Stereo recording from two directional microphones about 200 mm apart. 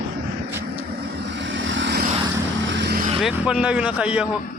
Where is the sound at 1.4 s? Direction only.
70° right (ahead or behind); by 3.1 s 55° right (ahead or behind).